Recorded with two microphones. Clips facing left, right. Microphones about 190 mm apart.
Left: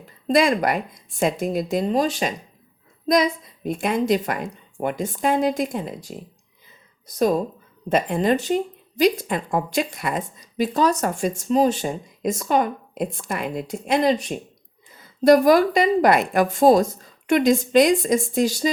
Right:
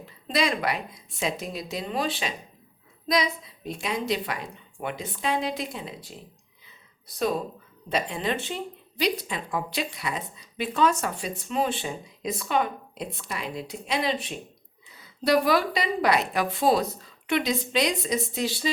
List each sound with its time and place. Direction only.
0.3 s speech: 50° left (ahead or behind)